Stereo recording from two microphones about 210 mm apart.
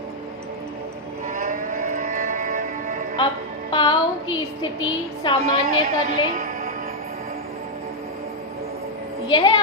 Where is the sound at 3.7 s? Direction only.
20° left (ahead or behind).